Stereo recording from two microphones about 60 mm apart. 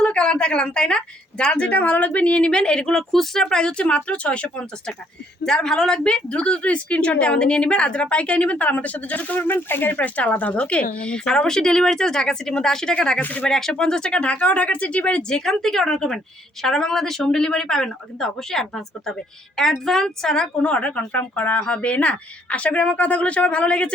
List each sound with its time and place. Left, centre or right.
0.0 s a woman's voice: centre
5.4 s a woman's voice: centre